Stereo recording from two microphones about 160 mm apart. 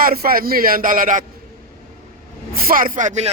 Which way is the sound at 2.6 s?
60° right (ahead or behind).